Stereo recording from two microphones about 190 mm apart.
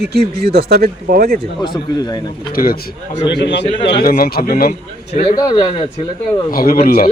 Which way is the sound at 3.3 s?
65° left (ahead or behind).